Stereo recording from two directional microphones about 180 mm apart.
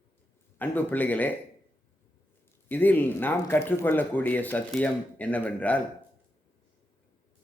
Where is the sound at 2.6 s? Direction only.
10° left (ahead or behind).